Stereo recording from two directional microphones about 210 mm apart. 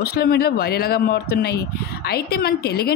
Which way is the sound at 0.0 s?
45° left (ahead or behind).